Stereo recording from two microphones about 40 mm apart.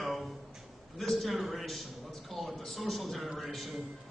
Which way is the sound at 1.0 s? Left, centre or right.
Centre.